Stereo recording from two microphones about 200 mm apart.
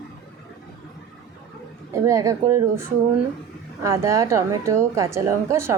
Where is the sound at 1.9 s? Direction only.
15° right (ahead or behind).